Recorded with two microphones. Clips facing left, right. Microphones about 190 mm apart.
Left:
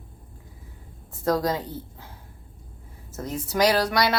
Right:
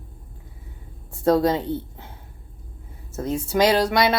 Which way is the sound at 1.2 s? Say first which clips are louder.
Right 5 dB; 25° right (ahead or behind).